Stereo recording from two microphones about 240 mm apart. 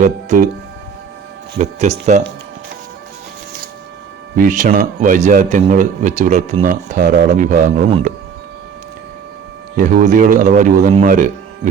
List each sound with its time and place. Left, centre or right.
0.0 s speech: right
1.5 s speech: right
4.4 s a man's voice: right
9.7 s a man's voice: right